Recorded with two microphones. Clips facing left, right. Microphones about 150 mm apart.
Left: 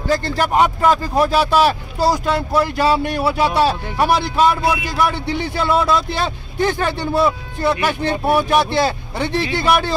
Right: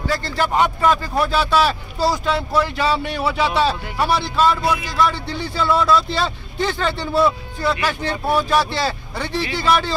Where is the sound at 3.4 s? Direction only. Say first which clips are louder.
Left 2 dB; 10° left (ahead or behind).